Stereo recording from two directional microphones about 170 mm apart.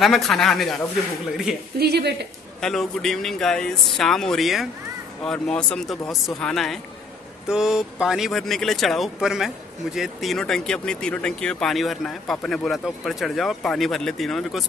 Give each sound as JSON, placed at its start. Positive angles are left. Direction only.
{"t": 0.0, "sound": "speech", "side_deg": 0}
{"t": 1.8, "sound": "a woman's voice", "side_deg": -75}
{"t": 2.6, "sound": "speech", "side_deg": 5}